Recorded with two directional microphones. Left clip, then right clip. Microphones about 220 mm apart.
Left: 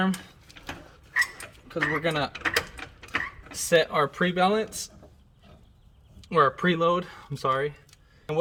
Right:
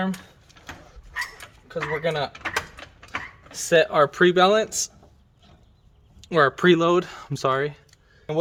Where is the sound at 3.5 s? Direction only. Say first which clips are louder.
Right 4 dB; 35° right (ahead or behind).